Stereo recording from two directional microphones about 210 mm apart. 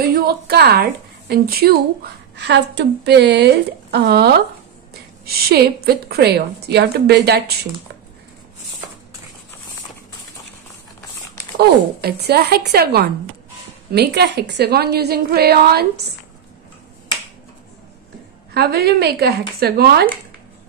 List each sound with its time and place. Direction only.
0.0 s a woman's voice: 50° right (ahead or behind)
11.5 s a woman's voice: 50° right (ahead or behind)
18.5 s a woman's voice: 50° right (ahead or behind)